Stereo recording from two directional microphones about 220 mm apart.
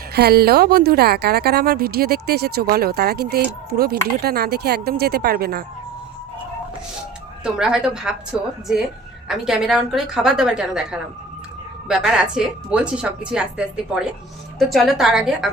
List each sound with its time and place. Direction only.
0.1 s speech: 45° right (ahead or behind)
7.4 s a woman's voice: 5° right (ahead or behind)
11.9 s a woman's voice: centre (ahead or behind)